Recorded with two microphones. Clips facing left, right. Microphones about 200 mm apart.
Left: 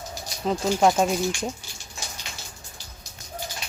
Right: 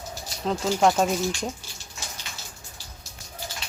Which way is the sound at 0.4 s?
5° left (ahead or behind).